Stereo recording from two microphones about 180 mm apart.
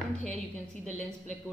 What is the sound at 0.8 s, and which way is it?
Speech, 40° right (ahead or behind).